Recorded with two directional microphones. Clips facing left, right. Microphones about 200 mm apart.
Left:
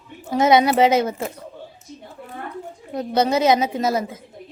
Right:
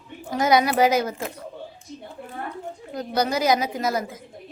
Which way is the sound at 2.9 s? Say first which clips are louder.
Left 5 dB; 25° left (ahead or behind).